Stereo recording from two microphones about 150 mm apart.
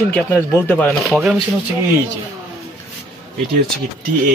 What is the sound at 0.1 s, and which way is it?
Speech, 10° left (ahead or behind).